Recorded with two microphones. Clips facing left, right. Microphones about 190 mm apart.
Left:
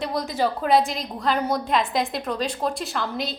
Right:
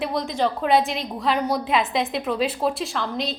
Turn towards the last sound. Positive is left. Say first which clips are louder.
# right 1 dB
turn(degrees=0)  # may be behind; listen again after turning